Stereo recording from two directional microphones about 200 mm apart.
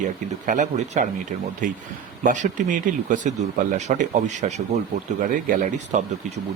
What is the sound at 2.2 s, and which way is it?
Speech, 40° right (ahead or behind).